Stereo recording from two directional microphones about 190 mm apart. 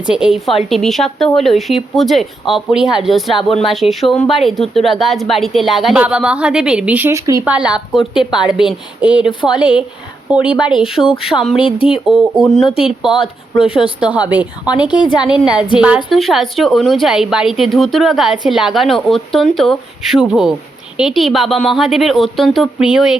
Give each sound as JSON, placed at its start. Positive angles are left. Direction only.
{"t": 0.1, "sound": "speech", "side_deg": -5}
{"t": 8.2, "sound": "a woman's voice", "side_deg": 25}
{"t": 8.5, "sound": "speech", "side_deg": -5}
{"t": 12.6, "sound": "a woman's voice", "side_deg": 30}
{"t": 13.6, "sound": "speech", "side_deg": -5}